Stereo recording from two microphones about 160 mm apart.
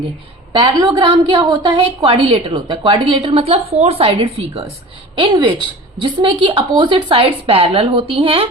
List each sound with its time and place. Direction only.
0.5 s a woman's voice: 25° right (ahead or behind)